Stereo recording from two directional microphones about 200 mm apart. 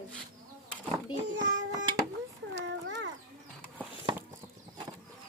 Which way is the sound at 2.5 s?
65° right (ahead or behind).